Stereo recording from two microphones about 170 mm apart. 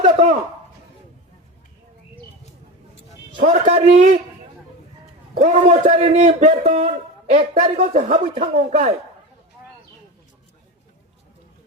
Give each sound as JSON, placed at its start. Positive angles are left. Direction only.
{"t": 0.0, "sound": "a sound", "side_deg": -45}
{"t": 3.3, "sound": "a man's voice", "side_deg": -40}
{"t": 5.3, "sound": "a man's voice", "side_deg": -45}